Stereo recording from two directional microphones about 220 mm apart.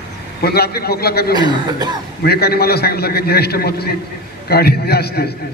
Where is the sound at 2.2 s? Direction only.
45° left (ahead or behind).